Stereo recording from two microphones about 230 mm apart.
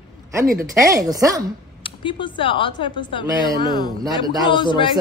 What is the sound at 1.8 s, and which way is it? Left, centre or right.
Speech, left.